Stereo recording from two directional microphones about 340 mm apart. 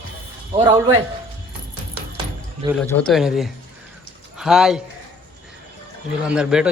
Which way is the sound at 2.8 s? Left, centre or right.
Centre.